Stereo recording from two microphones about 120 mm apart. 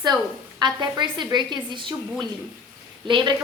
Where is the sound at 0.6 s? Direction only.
40° right (ahead or behind).